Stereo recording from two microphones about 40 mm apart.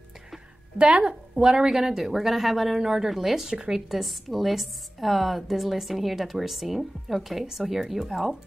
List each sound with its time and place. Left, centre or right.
0.7 s a woman's voice: right
1.0 s a woman's voice: centre